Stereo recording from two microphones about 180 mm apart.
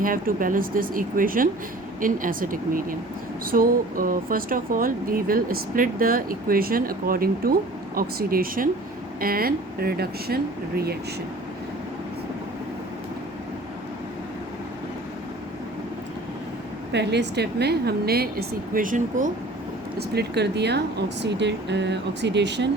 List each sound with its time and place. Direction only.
0.0 s a woman's voice: 50° right (ahead or behind)
16.9 s a woman's voice: 70° right (ahead or behind); by 19.3 s 45° right (ahead or behind)
20.0 s speech: 65° right (ahead or behind)